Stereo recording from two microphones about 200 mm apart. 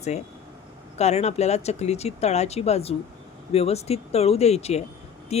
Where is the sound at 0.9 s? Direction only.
35° left (ahead or behind).